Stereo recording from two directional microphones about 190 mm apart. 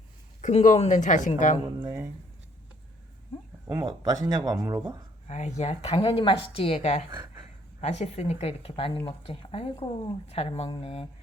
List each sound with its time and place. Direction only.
0.4 s speech: 40° left (ahead or behind)
1.8 s speech: 15° right (ahead or behind)
3.7 s speech: 15° right (ahead or behind)
5.3 s speech: 35° left (ahead or behind)
7.1 s speech: 20° right (ahead or behind)
7.8 s speech: 35° left (ahead or behind)